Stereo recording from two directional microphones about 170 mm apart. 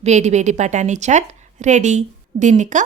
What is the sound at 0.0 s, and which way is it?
Speech, 40° right (ahead or behind).